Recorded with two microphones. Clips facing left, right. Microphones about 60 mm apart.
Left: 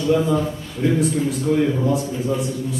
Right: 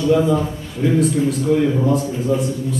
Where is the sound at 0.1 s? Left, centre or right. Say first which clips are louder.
Right 2 dB; centre.